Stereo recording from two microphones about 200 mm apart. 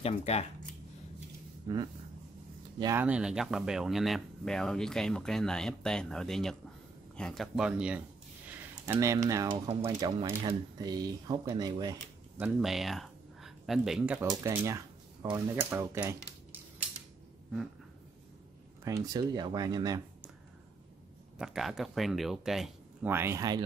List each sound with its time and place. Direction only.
0.0 s speech: 30° left (ahead or behind)
2.8 s speech: 10° right (ahead or behind)
12.4 s speech: 5° right (ahead or behind)
14.3 s speech: 15° right (ahead or behind)
18.9 s speech: 15° right (ahead or behind)
21.4 s speech: centre (ahead or behind); by 23.6 s 15° right (ahead or behind)